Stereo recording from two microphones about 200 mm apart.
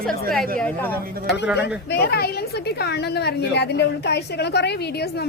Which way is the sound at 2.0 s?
55° left (ahead or behind).